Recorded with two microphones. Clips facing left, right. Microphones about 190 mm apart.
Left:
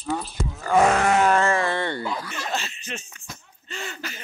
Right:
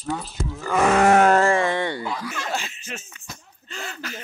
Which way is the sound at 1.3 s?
35° right (ahead or behind).